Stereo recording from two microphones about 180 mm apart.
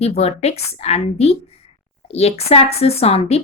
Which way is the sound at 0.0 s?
35° left (ahead or behind).